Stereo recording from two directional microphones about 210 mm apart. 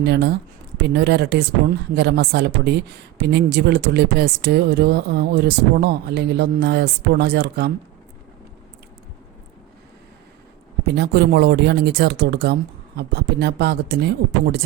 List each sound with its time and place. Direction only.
0.0 s a woman's voice: 50° right (ahead or behind)
10.8 s a woman's voice: 50° right (ahead or behind)